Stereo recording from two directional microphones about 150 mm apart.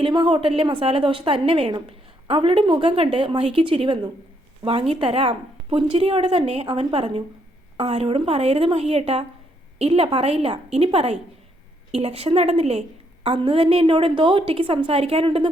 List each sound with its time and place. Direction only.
0.0 s a woman's voice: 30° right (ahead or behind)